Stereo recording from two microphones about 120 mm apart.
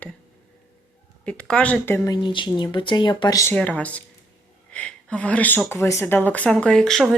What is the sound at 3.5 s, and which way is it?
Speech, 10° left (ahead or behind).